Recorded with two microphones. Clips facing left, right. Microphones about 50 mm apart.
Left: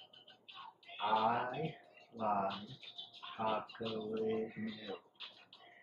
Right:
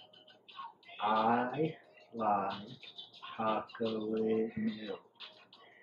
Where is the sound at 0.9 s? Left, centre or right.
Centre.